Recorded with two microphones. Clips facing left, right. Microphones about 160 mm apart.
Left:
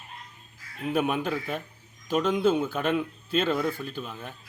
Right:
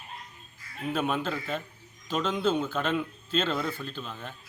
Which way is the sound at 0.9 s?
15° left (ahead or behind).